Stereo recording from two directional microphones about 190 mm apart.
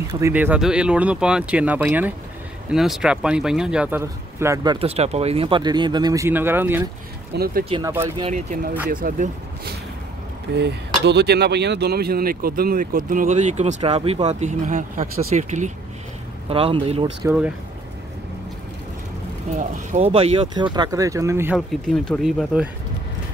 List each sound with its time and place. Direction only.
0.2 s speech: 10° right (ahead or behind)
4.7 s speech: 30° right (ahead or behind); by 6.8 s 10° right (ahead or behind)
7.3 s speech: 50° right (ahead or behind)
8.2 s speech: 40° right (ahead or behind)
10.5 s speech: 65° right (ahead or behind); by 17.3 s 30° right (ahead or behind)
19.5 s speech: 40° right (ahead or behind); by 21.5 s 15° right (ahead or behind)
21.5 s speech: 5° left (ahead or behind)